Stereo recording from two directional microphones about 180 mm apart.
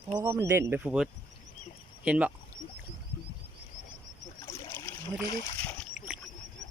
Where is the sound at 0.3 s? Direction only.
15° right (ahead or behind).